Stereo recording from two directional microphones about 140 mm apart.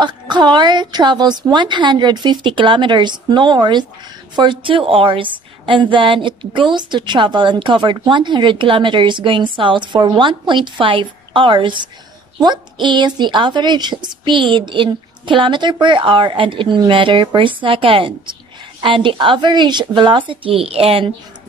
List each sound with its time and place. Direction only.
0.0 s a woman's voice: 30° right (ahead or behind)